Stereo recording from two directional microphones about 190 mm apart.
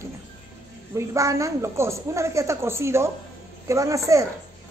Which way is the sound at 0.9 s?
15° right (ahead or behind).